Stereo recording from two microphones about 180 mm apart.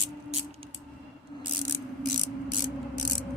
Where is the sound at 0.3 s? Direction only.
35° right (ahead or behind).